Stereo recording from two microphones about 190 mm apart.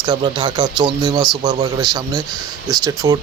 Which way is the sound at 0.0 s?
25° right (ahead or behind).